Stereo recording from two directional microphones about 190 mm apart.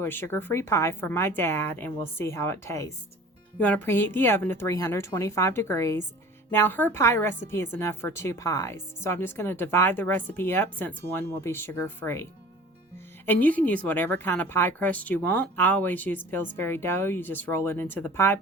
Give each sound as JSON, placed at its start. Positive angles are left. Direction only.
{"t": 0.0, "sound": "a woman's voice", "side_deg": 10}